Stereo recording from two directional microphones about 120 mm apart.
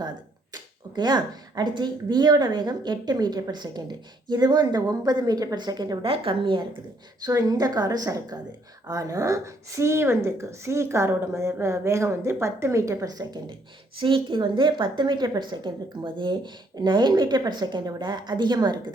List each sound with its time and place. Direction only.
0.5 s speech: 35° right (ahead or behind)
6.1 s a woman's voice: 45° right (ahead or behind)
7.3 s a woman's voice: 30° right (ahead or behind)